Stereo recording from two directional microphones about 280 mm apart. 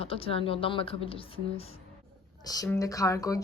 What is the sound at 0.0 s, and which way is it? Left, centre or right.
A woman's voice, centre.